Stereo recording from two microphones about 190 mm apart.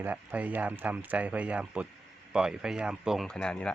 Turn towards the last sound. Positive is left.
turn(degrees=5)  # may be behind; listen again after turning